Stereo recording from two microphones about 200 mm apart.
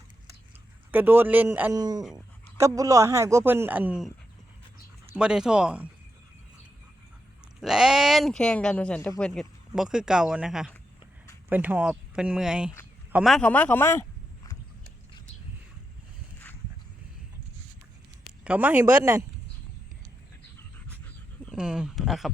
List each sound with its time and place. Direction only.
0.9 s speech: 10° right (ahead or behind)
5.1 s speech: 5° right (ahead or behind)
7.6 s a man's voice: centre (ahead or behind); by 14.5 s 15° left (ahead or behind)
18.4 s speech: 10° right (ahead or behind)
21.5 s speech: 5° right (ahead or behind)